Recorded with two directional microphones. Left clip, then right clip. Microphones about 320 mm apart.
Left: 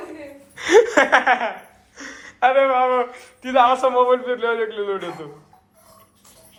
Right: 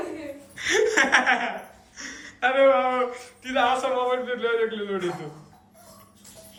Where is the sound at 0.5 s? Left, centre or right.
Centre.